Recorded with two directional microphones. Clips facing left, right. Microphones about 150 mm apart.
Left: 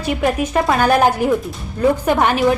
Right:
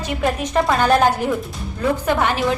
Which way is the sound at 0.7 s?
10° left (ahead or behind).